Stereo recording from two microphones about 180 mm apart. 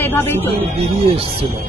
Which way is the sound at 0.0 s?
10° left (ahead or behind).